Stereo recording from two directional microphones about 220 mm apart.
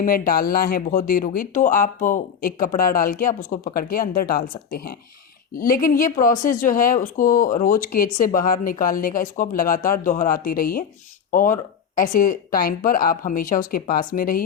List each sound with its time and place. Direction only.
0.0 s speech: 40° left (ahead or behind)